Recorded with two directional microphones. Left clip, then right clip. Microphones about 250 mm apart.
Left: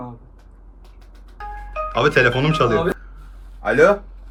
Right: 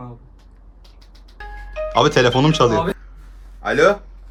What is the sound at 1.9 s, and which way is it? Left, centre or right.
Speech, centre.